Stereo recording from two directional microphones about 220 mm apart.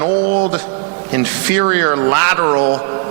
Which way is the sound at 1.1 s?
15° right (ahead or behind).